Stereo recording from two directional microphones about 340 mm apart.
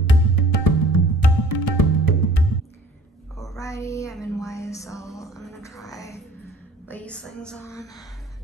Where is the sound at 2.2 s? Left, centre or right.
Left.